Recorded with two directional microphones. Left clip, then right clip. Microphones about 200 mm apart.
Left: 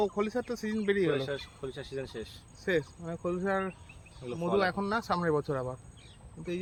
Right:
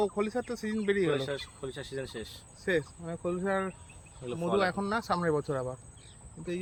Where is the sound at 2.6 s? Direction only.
Centre (ahead or behind).